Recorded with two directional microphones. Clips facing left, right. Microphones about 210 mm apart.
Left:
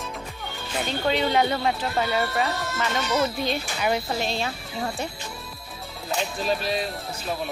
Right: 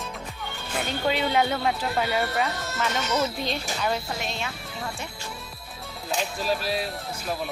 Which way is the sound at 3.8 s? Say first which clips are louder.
Left 3 dB; 15° left (ahead or behind).